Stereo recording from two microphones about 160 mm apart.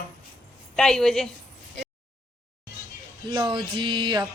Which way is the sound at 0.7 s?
5° left (ahead or behind).